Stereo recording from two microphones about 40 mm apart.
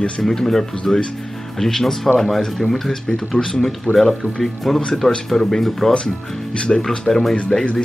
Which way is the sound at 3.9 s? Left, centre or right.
Left.